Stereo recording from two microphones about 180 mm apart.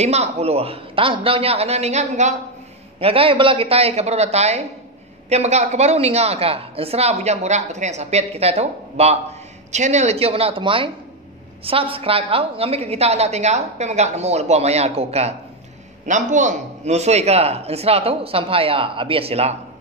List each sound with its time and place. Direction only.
0.0 s a woman's voice: 35° right (ahead or behind)